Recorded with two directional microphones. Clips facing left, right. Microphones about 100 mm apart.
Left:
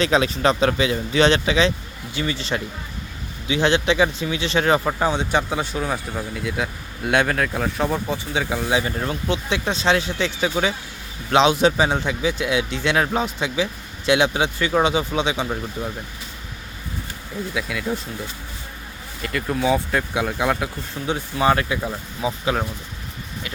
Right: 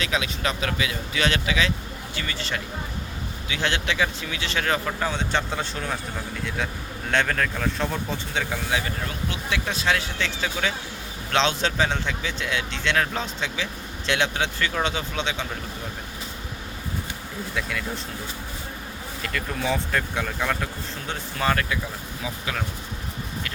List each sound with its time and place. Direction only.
0.0 s speech: 35° left (ahead or behind); by 15.4 s 15° left (ahead or behind)
17.5 s speech: 5° left (ahead or behind)
19.2 s speech: 5° left (ahead or behind); by 22.6 s 30° left (ahead or behind)